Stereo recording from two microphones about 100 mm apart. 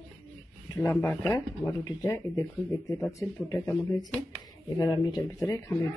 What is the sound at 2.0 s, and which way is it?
Speech, 30° left (ahead or behind).